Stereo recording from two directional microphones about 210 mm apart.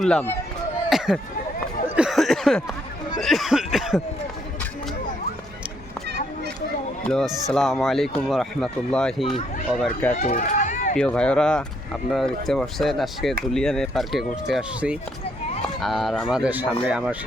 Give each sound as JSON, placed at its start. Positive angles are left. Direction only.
{"t": 0.0, "sound": "speech", "side_deg": 5}
{"t": 0.9, "sound": "chatter", "side_deg": 0}
{"t": 2.0, "sound": "a sound", "side_deg": 0}
{"t": 3.2, "sound": "speech", "side_deg": 0}
{"t": 7.0, "sound": "speech", "side_deg": 5}
{"t": 10.2, "sound": "run", "side_deg": 35}
{"t": 10.9, "sound": "speech", "side_deg": 5}